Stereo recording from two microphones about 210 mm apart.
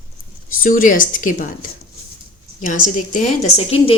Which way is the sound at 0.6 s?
40° left (ahead or behind).